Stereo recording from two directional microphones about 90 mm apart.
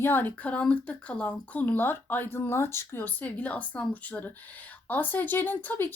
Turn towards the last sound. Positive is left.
turn(degrees=20)  # may be behind; listen again after turning